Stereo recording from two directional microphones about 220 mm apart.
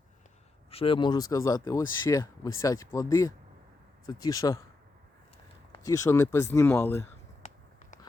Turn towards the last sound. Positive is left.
turn(degrees=10)  # may be behind; listen again after turning